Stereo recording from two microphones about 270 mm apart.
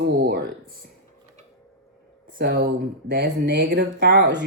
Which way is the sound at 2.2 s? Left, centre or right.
Right.